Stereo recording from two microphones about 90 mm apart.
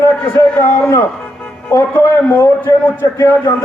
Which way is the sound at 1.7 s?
25° left (ahead or behind).